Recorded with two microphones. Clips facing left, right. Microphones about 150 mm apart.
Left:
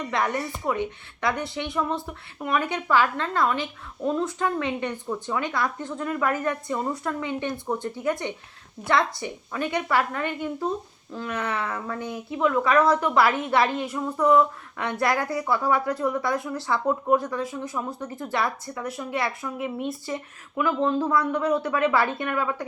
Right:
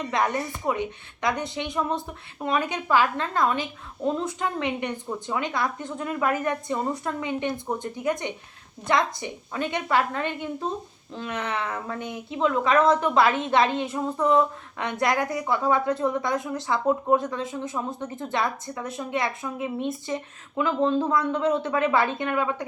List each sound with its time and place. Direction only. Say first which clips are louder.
0.1 s a woman's voice: right 1 dB; 20° right (ahead or behind)